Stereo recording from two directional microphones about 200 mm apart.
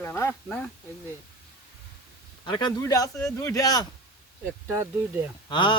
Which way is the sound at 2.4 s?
20° left (ahead or behind).